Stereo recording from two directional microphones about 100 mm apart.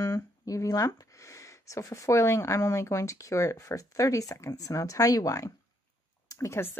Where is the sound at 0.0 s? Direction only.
30° left (ahead or behind).